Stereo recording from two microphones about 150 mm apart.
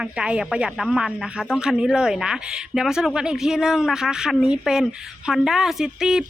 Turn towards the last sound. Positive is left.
turn(degrees=-5)  # may be behind; listen again after turning